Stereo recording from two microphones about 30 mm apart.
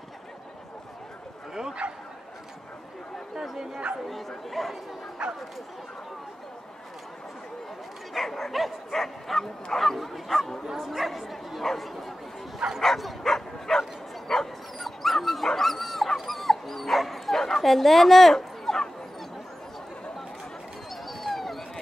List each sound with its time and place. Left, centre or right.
1.5 s speech: right
3.9 s speech: right
4.5 s speech: centre
5.2 s bow-wow: right
8.1 s speech: centre
12.5 s speech: centre
13.2 s bow-wow: centre
14.8 s dog: centre
15.4 s speech: centre
16.2 s dog: centre
18.3 s dog: centre
20.9 s a sound: centre